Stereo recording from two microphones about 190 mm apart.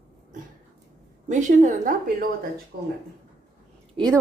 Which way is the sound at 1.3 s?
40° right (ahead or behind).